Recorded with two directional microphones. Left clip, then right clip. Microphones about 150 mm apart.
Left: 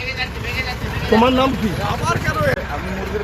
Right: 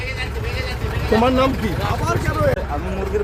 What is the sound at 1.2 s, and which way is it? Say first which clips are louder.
Speech: right 1 dB; 30° left (ahead or behind).